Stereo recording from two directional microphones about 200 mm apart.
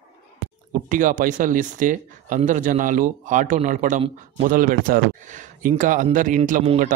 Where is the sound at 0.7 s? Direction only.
40° right (ahead or behind).